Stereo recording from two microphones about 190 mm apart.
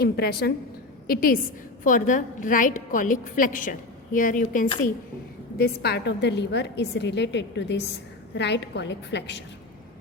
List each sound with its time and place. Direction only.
0.0 s a woman's voice: 55° left (ahead or behind)
5.5 s a woman's voice: 55° left (ahead or behind)